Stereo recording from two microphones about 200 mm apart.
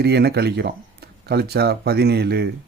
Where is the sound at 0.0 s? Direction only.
55° right (ahead or behind).